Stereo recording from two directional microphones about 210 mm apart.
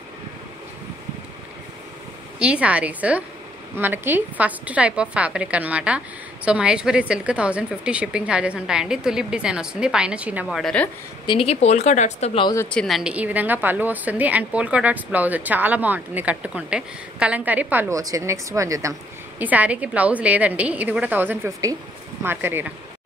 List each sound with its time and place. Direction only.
2.3 s a woman's voice: 5° right (ahead or behind)
11.2 s speech: 25° left (ahead or behind)
12.5 s a woman's voice: 5° left (ahead or behind)